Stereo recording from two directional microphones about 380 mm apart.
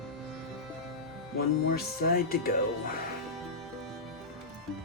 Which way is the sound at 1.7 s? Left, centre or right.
Left.